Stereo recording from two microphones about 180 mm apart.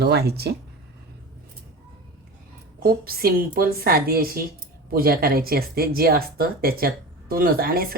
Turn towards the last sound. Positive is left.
turn(degrees=-55)  # may be behind; listen again after turning